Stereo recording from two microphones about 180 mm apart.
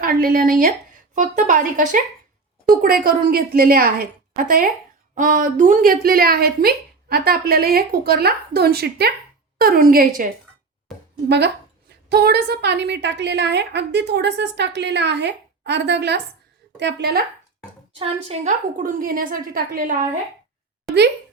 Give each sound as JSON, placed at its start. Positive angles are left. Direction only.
{"t": 0.0, "sound": "a woman's voice", "side_deg": -55}
{"t": 11.3, "sound": "a woman's voice", "side_deg": -70}
{"t": 18.0, "sound": "a woman's voice", "side_deg": -40}